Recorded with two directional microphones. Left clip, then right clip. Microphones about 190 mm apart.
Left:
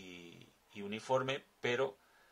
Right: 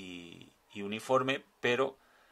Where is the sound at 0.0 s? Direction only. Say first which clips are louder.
Right 6 dB; 40° right (ahead or behind).